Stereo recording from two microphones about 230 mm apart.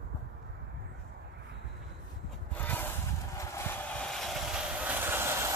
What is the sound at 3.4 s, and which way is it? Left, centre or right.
Vehicle, centre.